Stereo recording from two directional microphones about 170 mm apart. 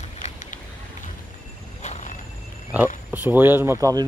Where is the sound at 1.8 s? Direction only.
45° left (ahead or behind).